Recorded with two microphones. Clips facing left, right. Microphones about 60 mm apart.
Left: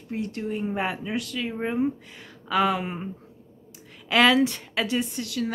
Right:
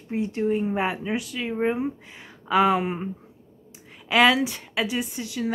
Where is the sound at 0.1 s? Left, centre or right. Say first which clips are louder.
Right 5 dB; right.